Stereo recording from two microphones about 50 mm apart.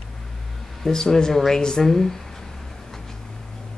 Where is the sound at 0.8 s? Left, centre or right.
Centre.